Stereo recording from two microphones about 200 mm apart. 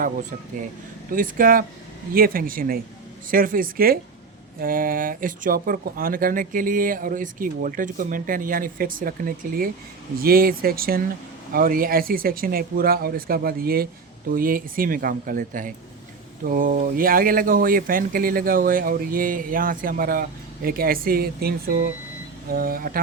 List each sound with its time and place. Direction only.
1.1 s speech: 45° right (ahead or behind)